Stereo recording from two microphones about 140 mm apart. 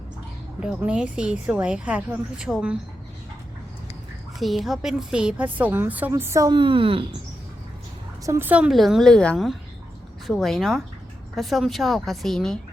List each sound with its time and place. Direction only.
0.6 s a woman's voice: 5° right (ahead or behind)
4.4 s a woman's voice: centre (ahead or behind); by 6.5 s 20° right (ahead or behind)
6.5 s a woman's voice: 35° right (ahead or behind)
8.2 s a woman's voice: 20° right (ahead or behind); by 12.5 s 5° left (ahead or behind)